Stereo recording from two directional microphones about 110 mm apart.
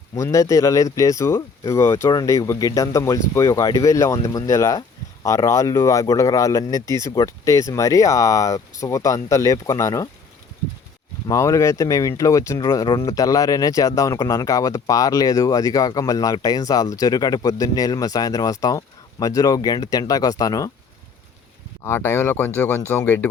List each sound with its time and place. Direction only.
0.2 s speech: 30° left (ahead or behind)
11.3 s speech: 30° left (ahead or behind)
21.8 s speech: 20° left (ahead or behind)